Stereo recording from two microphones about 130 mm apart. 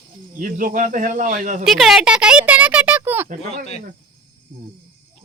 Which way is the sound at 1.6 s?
Centre (ahead or behind).